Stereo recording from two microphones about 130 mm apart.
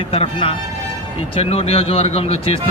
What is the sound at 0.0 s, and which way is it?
A man's voice, 45° left (ahead or behind).